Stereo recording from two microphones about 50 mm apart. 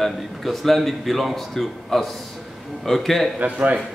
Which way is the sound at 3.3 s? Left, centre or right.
Right.